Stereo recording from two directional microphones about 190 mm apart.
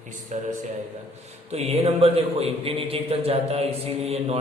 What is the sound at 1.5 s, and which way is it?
A man's voice, 30° right (ahead or behind).